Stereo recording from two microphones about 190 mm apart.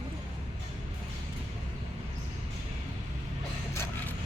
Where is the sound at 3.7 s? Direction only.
15° left (ahead or behind).